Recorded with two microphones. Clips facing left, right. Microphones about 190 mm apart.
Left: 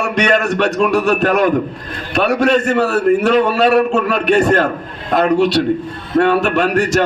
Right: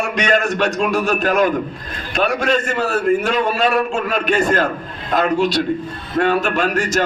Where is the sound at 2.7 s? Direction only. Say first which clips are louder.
Left 4 dB; 65° left (ahead or behind).